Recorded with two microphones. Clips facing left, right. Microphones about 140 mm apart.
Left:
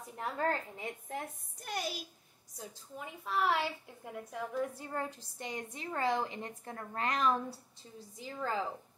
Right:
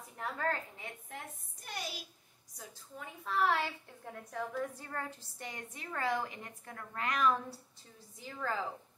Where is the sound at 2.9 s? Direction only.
15° left (ahead or behind); by 7.3 s 30° left (ahead or behind).